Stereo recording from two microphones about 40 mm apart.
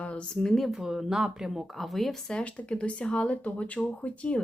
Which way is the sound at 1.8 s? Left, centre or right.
Centre.